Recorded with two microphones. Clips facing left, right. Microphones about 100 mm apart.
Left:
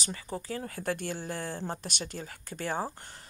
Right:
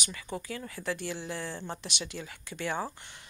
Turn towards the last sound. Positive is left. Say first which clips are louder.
# left 1 dB
turn(degrees=40)  # may be behind; listen again after turning